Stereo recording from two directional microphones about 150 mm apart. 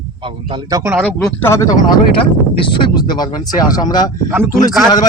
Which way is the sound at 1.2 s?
20° left (ahead or behind).